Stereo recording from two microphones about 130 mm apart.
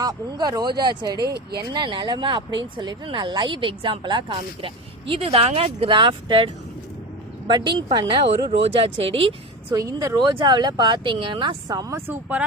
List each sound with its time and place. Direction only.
0.0 s speech: 30° right (ahead or behind); by 9.3 s 45° right (ahead or behind)
9.7 s speech: 25° right (ahead or behind)